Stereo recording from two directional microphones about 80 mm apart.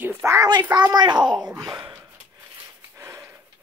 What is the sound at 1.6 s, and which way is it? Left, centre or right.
Speech, right.